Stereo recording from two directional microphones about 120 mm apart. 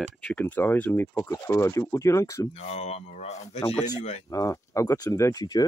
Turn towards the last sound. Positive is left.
turn(degrees=35)  # may be behind; listen again after turning